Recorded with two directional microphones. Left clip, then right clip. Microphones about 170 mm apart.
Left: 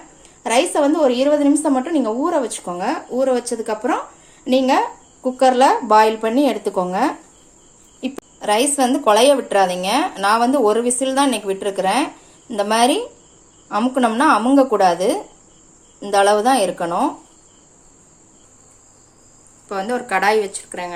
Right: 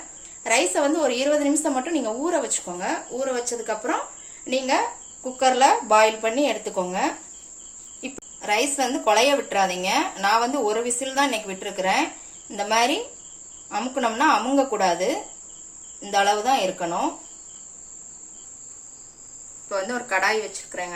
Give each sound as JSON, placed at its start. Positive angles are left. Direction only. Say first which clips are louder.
{"t": 0.4, "sound": "speech", "louder": "left 5 dB", "side_deg": 45}
{"t": 8.4, "sound": "speech", "louder": "left 6 dB", "side_deg": 55}
{"t": 19.6, "sound": "speech", "louder": "left 4 dB", "side_deg": 70}